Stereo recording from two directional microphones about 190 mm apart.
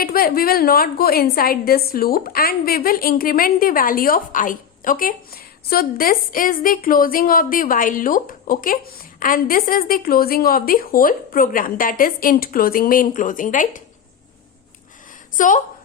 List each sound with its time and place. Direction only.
0.0 s a woman's voice: 50° left (ahead or behind)
15.4 s a woman's voice: 45° left (ahead or behind)